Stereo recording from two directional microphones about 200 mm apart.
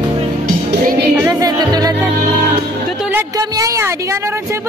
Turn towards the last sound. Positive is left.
turn(degrees=-15)  # may be behind; listen again after turning